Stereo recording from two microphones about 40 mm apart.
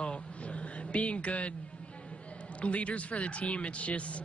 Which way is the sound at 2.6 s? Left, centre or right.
Left.